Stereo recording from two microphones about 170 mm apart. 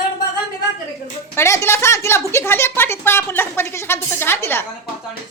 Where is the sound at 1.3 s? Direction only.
15° left (ahead or behind).